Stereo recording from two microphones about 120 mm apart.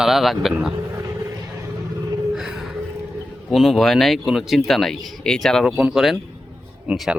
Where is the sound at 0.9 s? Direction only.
25° right (ahead or behind).